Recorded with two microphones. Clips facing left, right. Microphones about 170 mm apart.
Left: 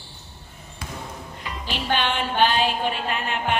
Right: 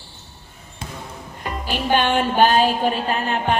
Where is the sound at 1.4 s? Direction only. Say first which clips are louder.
Right 5 dB; 45° right (ahead or behind).